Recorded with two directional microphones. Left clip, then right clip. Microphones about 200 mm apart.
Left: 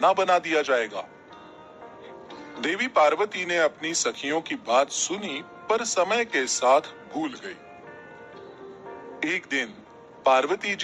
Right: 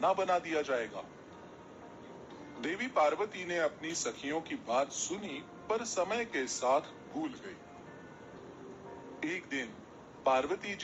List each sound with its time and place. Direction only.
0.0 s a man's voice: 30° left (ahead or behind)
2.6 s a man's voice: 30° left (ahead or behind)
9.2 s a man's voice: 30° left (ahead or behind)